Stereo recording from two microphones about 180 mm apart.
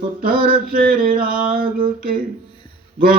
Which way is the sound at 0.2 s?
55° right (ahead or behind).